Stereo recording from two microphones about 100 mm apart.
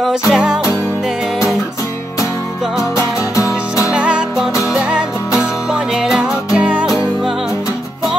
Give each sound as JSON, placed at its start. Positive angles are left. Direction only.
{"t": 0.3, "sound": "music", "side_deg": -5}
{"t": 3.3, "sound": "music", "side_deg": 30}
{"t": 3.9, "sound": "music", "side_deg": -10}
{"t": 6.9, "sound": "music", "side_deg": 0}